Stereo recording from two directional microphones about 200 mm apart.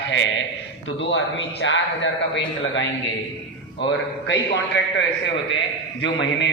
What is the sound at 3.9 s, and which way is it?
Speech, 60° left (ahead or behind).